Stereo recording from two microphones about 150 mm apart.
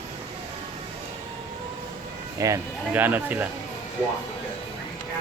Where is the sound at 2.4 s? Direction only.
15° right (ahead or behind).